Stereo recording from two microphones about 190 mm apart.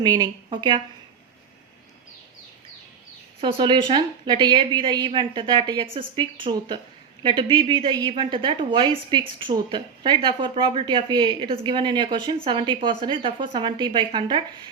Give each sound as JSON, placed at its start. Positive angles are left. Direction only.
{"t": 0.0, "sound": "speech", "side_deg": -20}
{"t": 3.4, "sound": "speech", "side_deg": -25}